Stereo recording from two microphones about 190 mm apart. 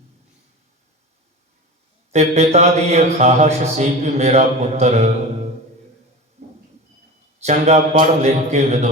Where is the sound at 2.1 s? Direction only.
35° right (ahead or behind).